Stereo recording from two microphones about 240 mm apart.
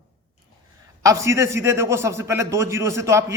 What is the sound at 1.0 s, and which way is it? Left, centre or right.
Speech, centre.